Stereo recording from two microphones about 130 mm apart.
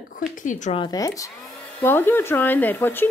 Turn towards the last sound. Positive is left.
turn(degrees=15)  # may be behind; listen again after turning